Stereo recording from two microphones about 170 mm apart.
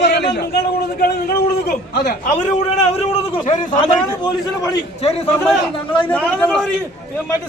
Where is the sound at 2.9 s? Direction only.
35° left (ahead or behind).